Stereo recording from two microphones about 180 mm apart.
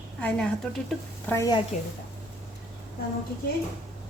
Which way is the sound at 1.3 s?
20° left (ahead or behind).